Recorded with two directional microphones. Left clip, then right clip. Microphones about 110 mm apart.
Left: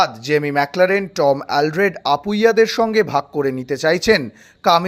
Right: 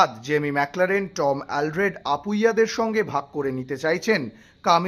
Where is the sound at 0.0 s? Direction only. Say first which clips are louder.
Left 4 dB; 40° left (ahead or behind).